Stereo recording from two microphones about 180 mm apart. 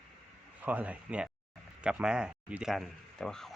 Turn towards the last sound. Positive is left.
turn(degrees=5)  # may be behind; listen again after turning